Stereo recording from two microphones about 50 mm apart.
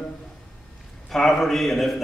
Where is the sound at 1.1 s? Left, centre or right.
Centre.